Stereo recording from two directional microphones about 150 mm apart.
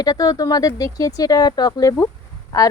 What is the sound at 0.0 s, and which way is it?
A woman's voice, 25° left (ahead or behind).